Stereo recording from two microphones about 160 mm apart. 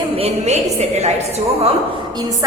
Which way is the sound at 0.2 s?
45° right (ahead or behind).